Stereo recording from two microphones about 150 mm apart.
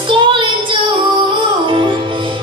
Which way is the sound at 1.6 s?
35° right (ahead or behind).